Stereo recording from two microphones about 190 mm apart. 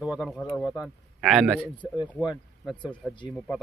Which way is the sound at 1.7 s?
25° left (ahead or behind).